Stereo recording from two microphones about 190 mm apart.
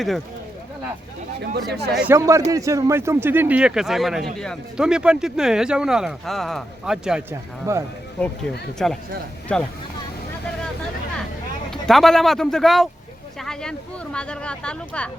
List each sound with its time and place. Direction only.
1.5 s speech: 55° right (ahead or behind)
1.9 s speech: 5° right (ahead or behind)
8.8 s speech: centre (ahead or behind)
11.7 s speech: centre (ahead or behind)